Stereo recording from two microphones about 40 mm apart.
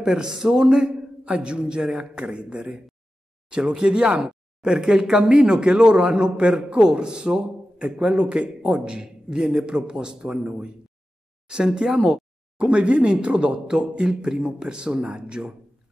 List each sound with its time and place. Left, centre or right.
0.0 s speech: centre
11.4 s speech: right